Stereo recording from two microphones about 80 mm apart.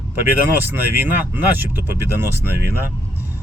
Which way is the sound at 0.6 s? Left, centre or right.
Right.